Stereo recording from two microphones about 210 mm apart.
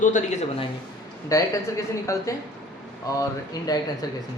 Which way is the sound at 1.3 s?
15° left (ahead or behind).